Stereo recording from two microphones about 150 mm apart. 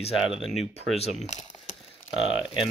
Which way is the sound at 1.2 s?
50° left (ahead or behind).